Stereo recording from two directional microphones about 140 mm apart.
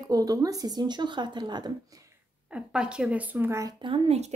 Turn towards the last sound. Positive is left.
turn(degrees=-40)  # may be behind; listen again after turning